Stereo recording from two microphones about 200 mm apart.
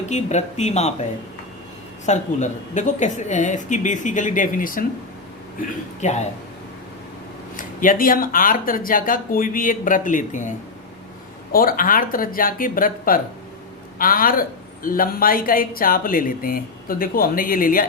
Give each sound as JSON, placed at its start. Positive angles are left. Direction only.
{"t": 0.0, "sound": "speech", "side_deg": 35}
{"t": 2.0, "sound": "speech", "side_deg": 35}
{"t": 6.0, "sound": "speech", "side_deg": 35}
{"t": 7.5, "sound": "speech", "side_deg": 40}
{"t": 11.5, "sound": "speech", "side_deg": 45}